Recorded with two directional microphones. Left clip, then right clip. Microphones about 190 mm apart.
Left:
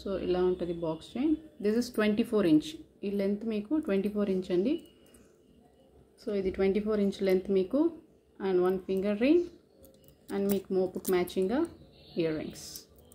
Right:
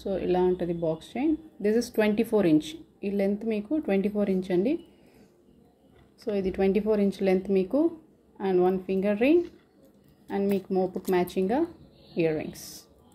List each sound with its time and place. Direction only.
0.0 s speech: 10° right (ahead or behind)
6.3 s speech: 15° right (ahead or behind)